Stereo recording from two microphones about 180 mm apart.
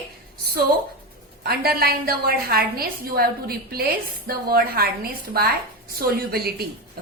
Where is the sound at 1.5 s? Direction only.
60° right (ahead or behind).